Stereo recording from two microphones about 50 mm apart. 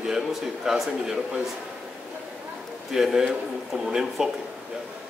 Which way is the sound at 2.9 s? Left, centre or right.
Centre.